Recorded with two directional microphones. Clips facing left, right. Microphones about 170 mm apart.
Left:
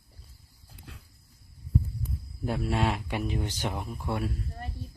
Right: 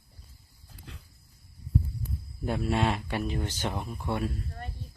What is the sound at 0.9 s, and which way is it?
Dog, 5° left (ahead or behind).